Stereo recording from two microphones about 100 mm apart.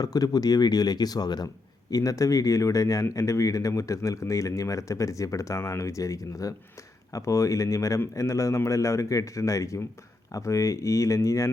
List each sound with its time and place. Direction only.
0.0 s speech: 40° left (ahead or behind)